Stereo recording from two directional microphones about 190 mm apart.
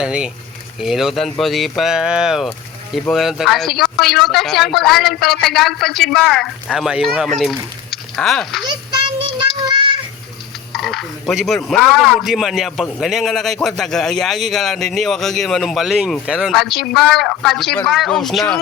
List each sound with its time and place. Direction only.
0.0 s speech: 5° right (ahead or behind)
8.6 s child singing: 25° right (ahead or behind)
10.7 s speech: centre (ahead or behind)